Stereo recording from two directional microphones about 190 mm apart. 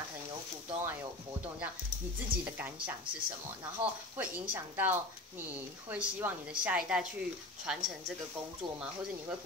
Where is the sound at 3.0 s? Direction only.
25° right (ahead or behind).